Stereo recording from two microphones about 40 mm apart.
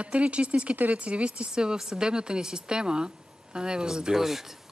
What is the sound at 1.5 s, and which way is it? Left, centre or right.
A woman's voice, centre.